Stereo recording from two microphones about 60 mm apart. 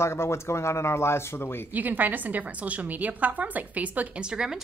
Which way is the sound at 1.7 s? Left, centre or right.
Right.